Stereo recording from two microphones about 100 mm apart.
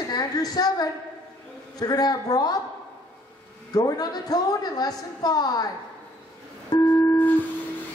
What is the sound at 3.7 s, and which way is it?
A woman's voice, 40° left (ahead or behind).